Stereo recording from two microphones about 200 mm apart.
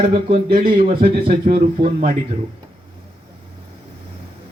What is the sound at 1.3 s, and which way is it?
Speech, 45° right (ahead or behind).